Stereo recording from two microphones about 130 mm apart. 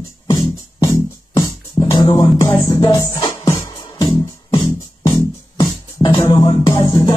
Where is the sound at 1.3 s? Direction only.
35° left (ahead or behind).